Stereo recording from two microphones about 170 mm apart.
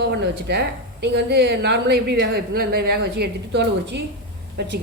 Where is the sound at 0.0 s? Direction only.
80° right.